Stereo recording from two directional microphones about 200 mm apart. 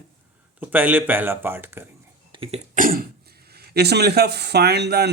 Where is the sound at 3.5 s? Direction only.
50° right (ahead or behind).